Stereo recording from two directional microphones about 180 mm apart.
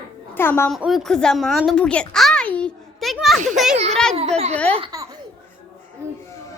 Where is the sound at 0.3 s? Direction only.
10° left (ahead or behind).